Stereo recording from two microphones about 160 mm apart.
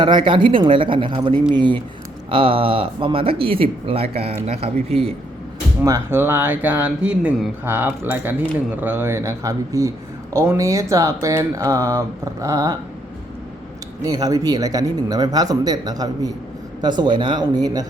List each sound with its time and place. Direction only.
0.0 s speech: 30° right (ahead or behind)
5.8 s speech: 20° right (ahead or behind)
14.0 s speech: 25° right (ahead or behind)